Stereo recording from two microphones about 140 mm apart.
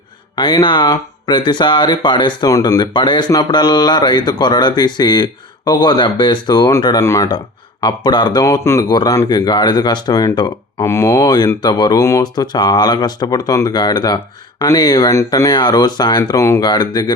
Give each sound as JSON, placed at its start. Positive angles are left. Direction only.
{"t": 0.3, "sound": "speech", "side_deg": 30}